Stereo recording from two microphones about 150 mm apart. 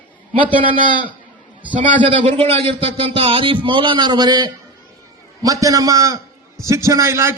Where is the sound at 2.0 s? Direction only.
35° right (ahead or behind).